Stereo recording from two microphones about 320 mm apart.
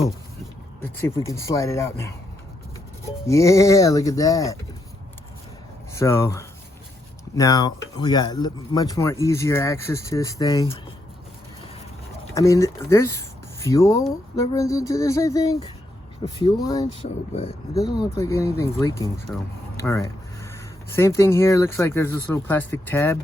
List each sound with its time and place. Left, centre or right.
1.3 s speech: centre
5.9 s speech: centre
12.3 s speech: centre